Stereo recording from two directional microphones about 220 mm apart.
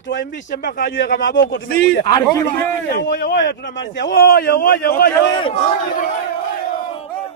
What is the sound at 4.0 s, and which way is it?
A man's voice, 50° left (ahead or behind).